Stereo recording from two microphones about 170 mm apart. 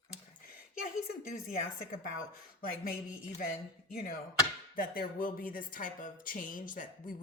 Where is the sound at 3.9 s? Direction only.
60° left (ahead or behind).